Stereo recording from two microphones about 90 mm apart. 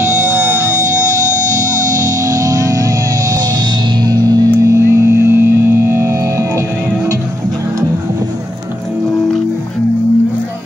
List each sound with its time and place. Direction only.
2.2 s music: 40° right (ahead or behind)
4.6 s hum: 35° right (ahead or behind)
4.9 s music: 30° right (ahead or behind)